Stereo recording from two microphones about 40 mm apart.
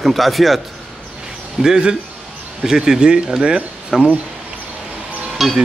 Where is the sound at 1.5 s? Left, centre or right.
Centre.